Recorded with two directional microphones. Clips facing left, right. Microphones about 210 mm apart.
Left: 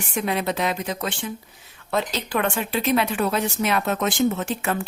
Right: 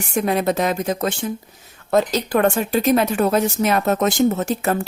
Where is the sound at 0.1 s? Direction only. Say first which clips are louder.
Right 5 dB; 45° right (ahead or behind).